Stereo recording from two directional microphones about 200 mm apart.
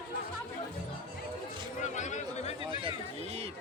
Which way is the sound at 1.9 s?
35° left (ahead or behind).